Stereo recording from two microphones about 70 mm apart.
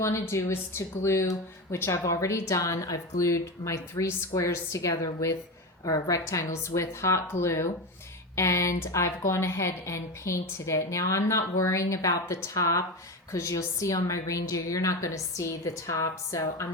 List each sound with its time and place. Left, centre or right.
0.0 s speech: left
5.8 s a woman's voice: left
6.1 s speech: left